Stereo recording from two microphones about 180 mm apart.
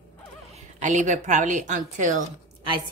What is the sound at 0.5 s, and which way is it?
A woman's voice, 40° right (ahead or behind).